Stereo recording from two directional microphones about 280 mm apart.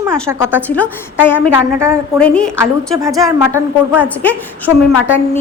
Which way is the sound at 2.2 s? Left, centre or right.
Centre.